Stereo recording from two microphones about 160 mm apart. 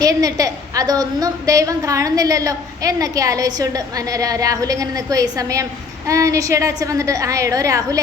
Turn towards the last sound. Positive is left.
turn(degrees=-20)  # may be behind; listen again after turning